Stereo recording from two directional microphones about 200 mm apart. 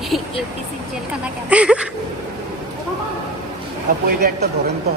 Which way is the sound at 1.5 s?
5° right (ahead or behind).